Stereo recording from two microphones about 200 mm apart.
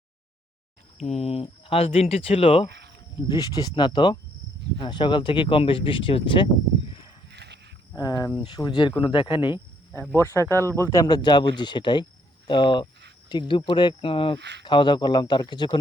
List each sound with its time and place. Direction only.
0.9 s speech: 30° left (ahead or behind)
2.6 s cricket: 55° right (ahead or behind)
3.6 s speech: 25° left (ahead or behind)
7.3 s a sound: 55° right (ahead or behind)
7.9 s speech: 20° left (ahead or behind)
9.9 s speech: 10° left (ahead or behind); by 14.3 s 25° left (ahead or behind)
14.3 s speech: 60° right (ahead or behind)
14.6 s speech: 25° left (ahead or behind)